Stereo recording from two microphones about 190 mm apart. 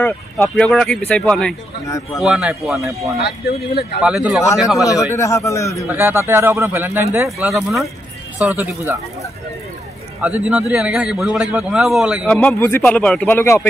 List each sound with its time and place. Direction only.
0.0 s a man's voice: 5° left (ahead or behind)
1.9 s a man's voice: 15° left (ahead or behind)
2.2 s a man's voice: 5° right (ahead or behind)
3.2 s speech: 60° left (ahead or behind)
4.0 s a man's voice: 5° right (ahead or behind)
5.1 s a man's voice: 15° left (ahead or behind)
5.9 s a man's voice: 10° right (ahead or behind)
10.2 s a man's voice: 5° right (ahead or behind); by 13.7 s 10° left (ahead or behind)